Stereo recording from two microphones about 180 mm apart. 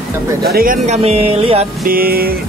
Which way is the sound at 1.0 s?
35° right (ahead or behind).